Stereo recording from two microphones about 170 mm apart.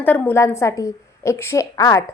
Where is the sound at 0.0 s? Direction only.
10° left (ahead or behind).